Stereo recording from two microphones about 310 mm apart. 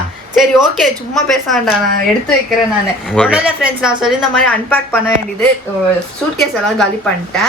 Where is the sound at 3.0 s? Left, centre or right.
Centre.